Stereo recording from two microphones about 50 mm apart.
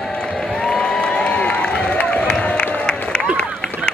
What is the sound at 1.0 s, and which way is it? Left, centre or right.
Run, left.